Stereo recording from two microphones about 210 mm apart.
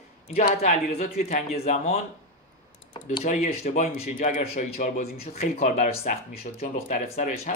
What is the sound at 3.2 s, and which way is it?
Speech, 35° left (ahead or behind).